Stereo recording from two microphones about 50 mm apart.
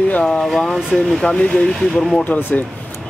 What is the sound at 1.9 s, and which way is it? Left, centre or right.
Speech, centre.